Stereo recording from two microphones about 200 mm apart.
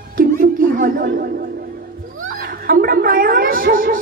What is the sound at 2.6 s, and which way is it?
Gargling, 50° right (ahead or behind).